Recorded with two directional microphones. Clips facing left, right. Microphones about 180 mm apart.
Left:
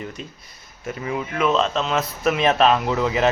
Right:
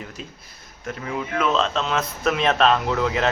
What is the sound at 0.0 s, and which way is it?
Speech, centre (ahead or behind).